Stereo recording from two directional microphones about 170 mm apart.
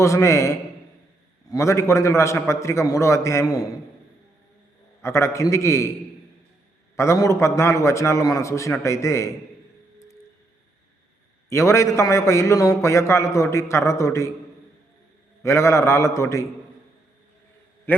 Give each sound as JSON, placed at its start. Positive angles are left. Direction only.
{"t": 0.0, "sound": "a man's voice", "side_deg": 15}
{"t": 5.0, "sound": "a man's voice", "side_deg": 15}
{"t": 6.9, "sound": "a man's voice", "side_deg": 15}
{"t": 11.4, "sound": "a man's voice", "side_deg": 15}
{"t": 15.4, "sound": "a man's voice", "side_deg": 15}
{"t": 17.9, "sound": "a sound", "side_deg": 10}